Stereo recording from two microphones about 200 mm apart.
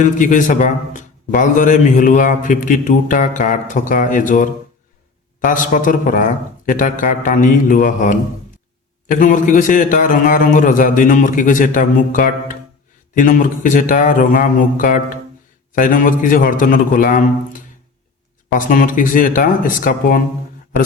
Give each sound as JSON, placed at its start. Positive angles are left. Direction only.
{"t": 0.0, "sound": "a man's voice", "side_deg": 40}
{"t": 5.5, "sound": "a man's voice", "side_deg": 40}